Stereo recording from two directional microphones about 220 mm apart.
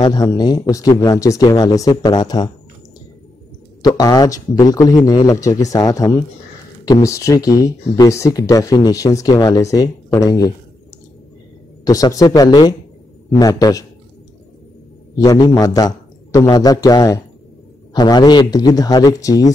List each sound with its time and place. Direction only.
0.0 s speech: 20° left (ahead or behind)
3.8 s speech: 15° left (ahead or behind)
11.8 s speech: 15° left (ahead or behind)
15.1 s speech: 15° left (ahead or behind)